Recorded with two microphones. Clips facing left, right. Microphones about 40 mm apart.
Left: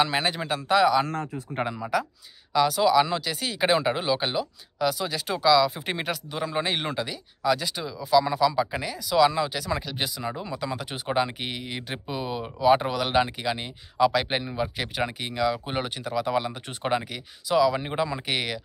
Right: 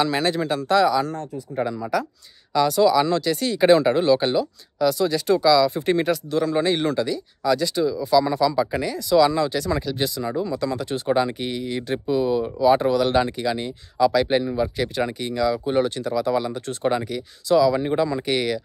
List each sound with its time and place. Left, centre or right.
0.0 s speech: centre
1.2 s a man's voice: left
1.8 s speech: centre